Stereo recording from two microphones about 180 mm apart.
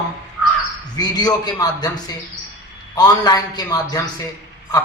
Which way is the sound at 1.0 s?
20° left (ahead or behind).